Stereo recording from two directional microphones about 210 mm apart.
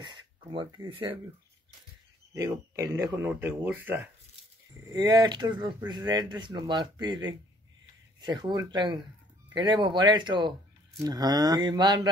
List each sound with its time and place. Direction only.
0.0 s speech: 20° right (ahead or behind)
2.3 s speech: 15° right (ahead or behind)